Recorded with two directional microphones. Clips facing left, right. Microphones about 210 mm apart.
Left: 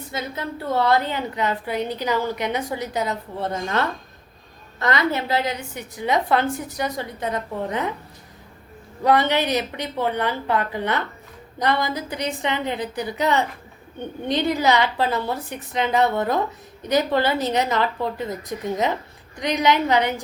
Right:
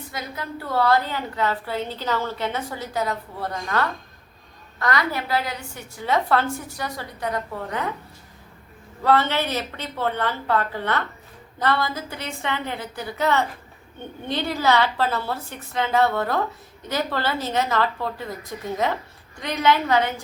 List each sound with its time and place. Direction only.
0.1 s a woman's voice: 25° left (ahead or behind)
9.0 s a woman's voice: 15° left (ahead or behind)